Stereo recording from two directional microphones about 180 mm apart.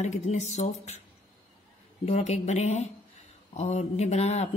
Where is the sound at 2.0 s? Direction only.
35° left (ahead or behind).